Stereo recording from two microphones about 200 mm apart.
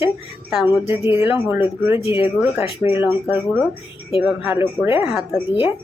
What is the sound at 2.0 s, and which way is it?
Speech, 25° left (ahead or behind).